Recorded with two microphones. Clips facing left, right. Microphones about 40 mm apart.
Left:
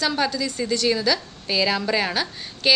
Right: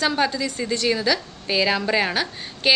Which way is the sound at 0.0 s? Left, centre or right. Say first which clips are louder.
Right 1 dB; centre.